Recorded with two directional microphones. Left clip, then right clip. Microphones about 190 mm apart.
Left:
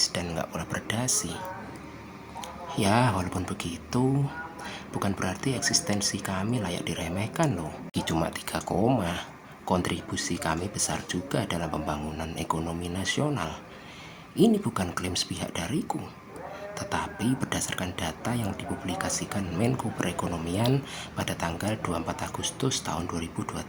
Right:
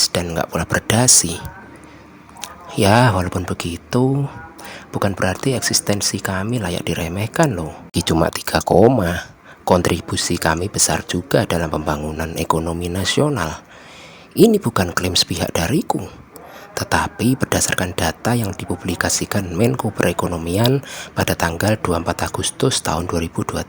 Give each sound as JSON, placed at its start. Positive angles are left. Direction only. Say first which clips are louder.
{"t": 0.0, "sound": "a sound", "louder": "right 10 dB", "side_deg": -40}
{"t": 0.3, "sound": "speech", "louder": "right 12 dB", "side_deg": -45}
{"t": 2.4, "sound": "speech", "louder": "right 11 dB", "side_deg": -45}